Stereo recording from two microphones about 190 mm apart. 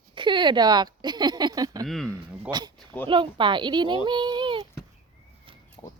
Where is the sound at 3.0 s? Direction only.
25° right (ahead or behind).